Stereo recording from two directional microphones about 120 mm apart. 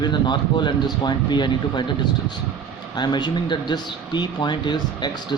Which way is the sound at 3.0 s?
40° left (ahead or behind).